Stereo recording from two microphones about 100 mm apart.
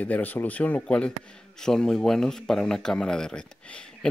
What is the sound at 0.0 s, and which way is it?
Speech, 15° left (ahead or behind).